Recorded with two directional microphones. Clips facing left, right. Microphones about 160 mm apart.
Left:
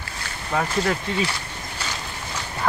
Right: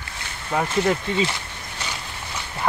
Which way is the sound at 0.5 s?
10° right (ahead or behind).